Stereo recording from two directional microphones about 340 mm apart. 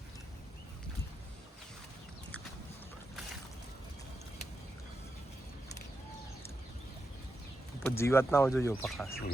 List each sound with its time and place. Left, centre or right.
7.9 s speech: centre